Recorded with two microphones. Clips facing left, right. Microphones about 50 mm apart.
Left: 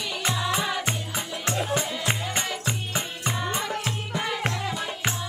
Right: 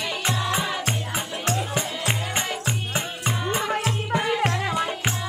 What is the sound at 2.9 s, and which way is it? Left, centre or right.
Music, right.